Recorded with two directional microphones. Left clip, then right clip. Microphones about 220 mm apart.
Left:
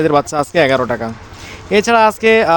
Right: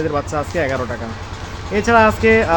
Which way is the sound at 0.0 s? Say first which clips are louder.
Left 7 dB; 50° left (ahead or behind).